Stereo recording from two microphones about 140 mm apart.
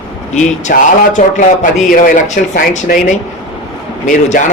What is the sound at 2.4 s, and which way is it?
Speech, 85° left.